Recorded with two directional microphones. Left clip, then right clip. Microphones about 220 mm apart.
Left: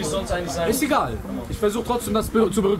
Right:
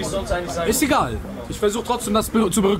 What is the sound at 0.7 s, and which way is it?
A man's voice, 25° right (ahead or behind).